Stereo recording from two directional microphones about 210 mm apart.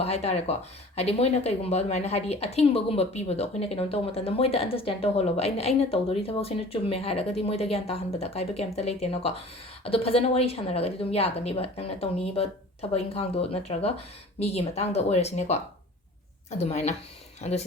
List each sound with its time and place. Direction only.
0.0 s speech: 30° left (ahead or behind)